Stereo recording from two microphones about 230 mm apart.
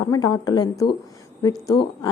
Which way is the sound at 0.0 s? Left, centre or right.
Centre.